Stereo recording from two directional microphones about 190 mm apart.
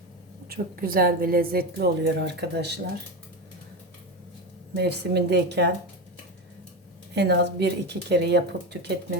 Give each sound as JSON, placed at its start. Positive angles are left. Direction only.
{"t": 0.4, "sound": "a woman's voice", "side_deg": -55}
{"t": 4.8, "sound": "speech", "side_deg": -60}
{"t": 7.2, "sound": "speech", "side_deg": -60}